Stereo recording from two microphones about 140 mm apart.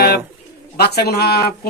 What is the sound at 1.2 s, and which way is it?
Speech, 90° left.